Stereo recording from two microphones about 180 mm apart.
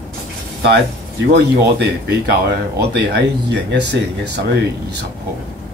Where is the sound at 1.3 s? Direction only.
65° right (ahead or behind).